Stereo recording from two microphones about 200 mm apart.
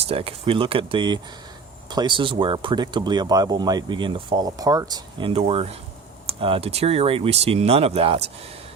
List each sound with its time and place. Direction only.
0.1 s speech: 30° right (ahead or behind)